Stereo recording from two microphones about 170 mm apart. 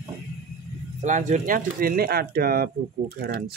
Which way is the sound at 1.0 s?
45° right (ahead or behind).